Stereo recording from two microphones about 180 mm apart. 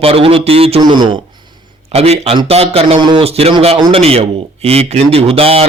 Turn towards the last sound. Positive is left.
turn(degrees=-30)  # may be behind; listen again after turning